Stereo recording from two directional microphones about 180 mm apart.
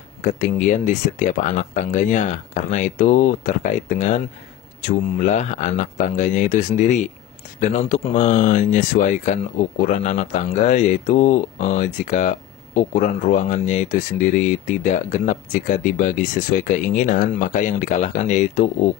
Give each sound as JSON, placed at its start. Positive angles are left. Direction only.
{"t": 0.2, "sound": "speech", "side_deg": 45}